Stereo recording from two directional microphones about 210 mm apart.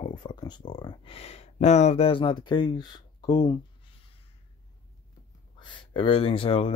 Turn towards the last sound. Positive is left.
turn(degrees=25)  # may be behind; listen again after turning